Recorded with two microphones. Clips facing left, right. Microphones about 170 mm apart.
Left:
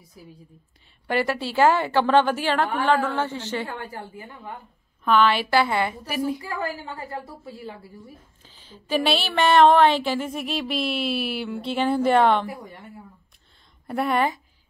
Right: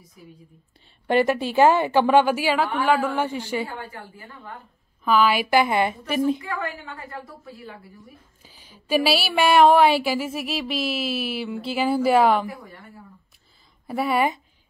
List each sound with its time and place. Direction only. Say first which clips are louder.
1.0 s speech: right 4 dB; 20° right (ahead or behind)
5.0 s speech: even; 5° right (ahead or behind); by 6.4 s 25° right (ahead or behind)
6.6 s a woman's voice: left 2 dB; 30° left (ahead or behind)
8.4 s speech: left 3 dB; 10° right (ahead or behind)
12.4 s a woman's voice: left 1 dB; 25° left (ahead or behind)
13.8 s a woman's voice: right 1 dB; 5° right (ahead or behind)